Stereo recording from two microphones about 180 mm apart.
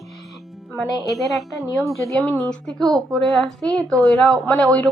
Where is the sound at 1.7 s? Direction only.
15° left (ahead or behind).